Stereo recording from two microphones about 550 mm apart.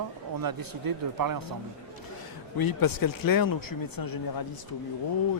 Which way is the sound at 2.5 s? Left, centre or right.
Left.